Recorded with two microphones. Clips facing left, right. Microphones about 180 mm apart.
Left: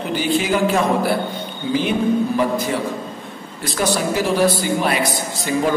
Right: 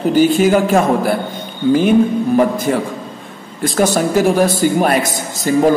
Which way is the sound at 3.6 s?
45° right (ahead or behind).